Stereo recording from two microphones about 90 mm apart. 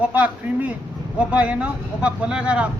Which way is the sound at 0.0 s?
15° right (ahead or behind).